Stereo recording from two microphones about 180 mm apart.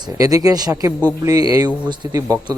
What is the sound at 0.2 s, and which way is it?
Speech, 20° right (ahead or behind).